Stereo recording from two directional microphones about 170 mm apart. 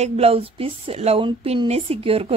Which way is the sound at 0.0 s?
40° right (ahead or behind).